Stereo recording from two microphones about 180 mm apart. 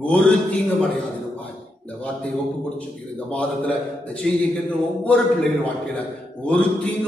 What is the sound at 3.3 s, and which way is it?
A man's voice, 5° left (ahead or behind).